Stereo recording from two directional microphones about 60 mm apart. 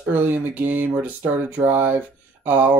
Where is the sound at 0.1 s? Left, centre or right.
Right.